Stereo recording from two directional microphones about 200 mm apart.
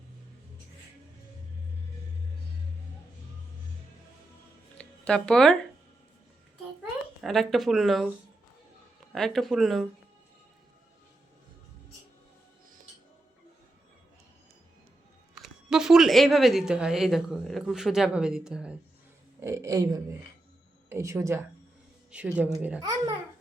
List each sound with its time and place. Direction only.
4.8 s a sound: 5° left (ahead or behind)
7.2 s speech: centre (ahead or behind)
9.1 s speech: centre (ahead or behind)
15.4 s speech: 5° right (ahead or behind)
19.4 s speech: 15° right (ahead or behind)